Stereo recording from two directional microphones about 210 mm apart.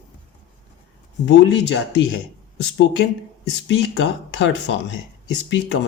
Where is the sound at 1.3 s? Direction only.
60° left (ahead or behind).